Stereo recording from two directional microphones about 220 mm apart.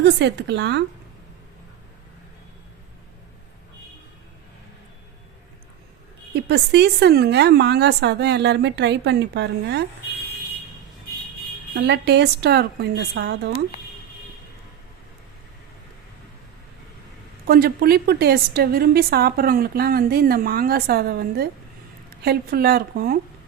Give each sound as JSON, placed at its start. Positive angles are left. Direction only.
{"t": 0.0, "sound": "a woman's voice", "side_deg": -50}
{"t": 6.3, "sound": "a woman's voice", "side_deg": -50}
{"t": 11.7, "sound": "a woman's voice", "side_deg": -50}
{"t": 17.4, "sound": "a woman's voice", "side_deg": -45}